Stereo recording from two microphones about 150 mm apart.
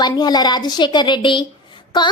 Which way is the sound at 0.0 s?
30° left (ahead or behind).